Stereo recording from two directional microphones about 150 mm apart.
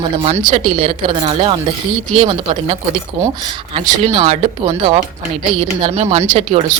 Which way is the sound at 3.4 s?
30° right (ahead or behind).